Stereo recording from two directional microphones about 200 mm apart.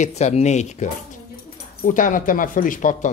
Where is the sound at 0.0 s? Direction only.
35° left (ahead or behind).